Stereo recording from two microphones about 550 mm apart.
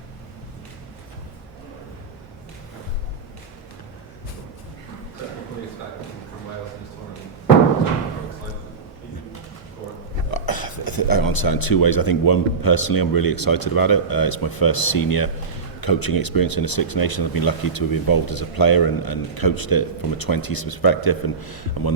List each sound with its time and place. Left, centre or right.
10.3 s speech: left